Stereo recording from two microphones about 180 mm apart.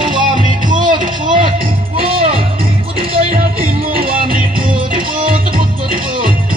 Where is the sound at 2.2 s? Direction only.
30° right (ahead or behind).